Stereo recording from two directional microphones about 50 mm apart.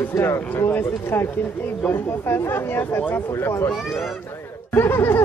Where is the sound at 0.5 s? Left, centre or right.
Left.